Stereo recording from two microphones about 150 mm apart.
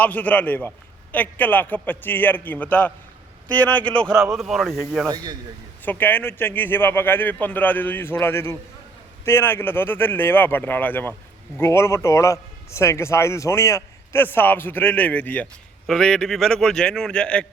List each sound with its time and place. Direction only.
0.0 s a man's voice: 10° left (ahead or behind)
4.4 s a man's voice: centre (ahead or behind)
5.0 s speech: 25° right (ahead or behind)
5.8 s a man's voice: 10° left (ahead or behind)